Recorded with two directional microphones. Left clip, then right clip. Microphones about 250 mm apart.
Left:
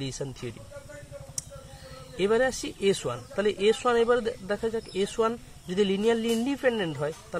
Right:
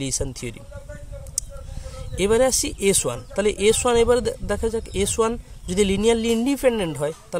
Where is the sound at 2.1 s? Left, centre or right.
Right.